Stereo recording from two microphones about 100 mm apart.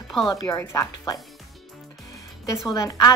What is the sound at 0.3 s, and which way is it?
Speech, 35° left (ahead or behind).